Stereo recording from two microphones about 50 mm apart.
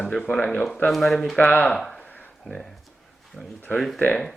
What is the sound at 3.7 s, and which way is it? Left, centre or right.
Speech, centre.